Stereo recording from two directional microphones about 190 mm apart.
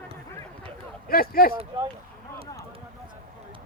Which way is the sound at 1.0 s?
50° left (ahead or behind).